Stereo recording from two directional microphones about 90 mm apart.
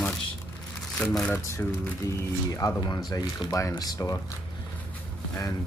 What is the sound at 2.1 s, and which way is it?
Speech, 40° left (ahead or behind).